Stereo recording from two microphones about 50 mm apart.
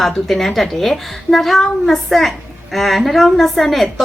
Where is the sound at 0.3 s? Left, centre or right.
Centre.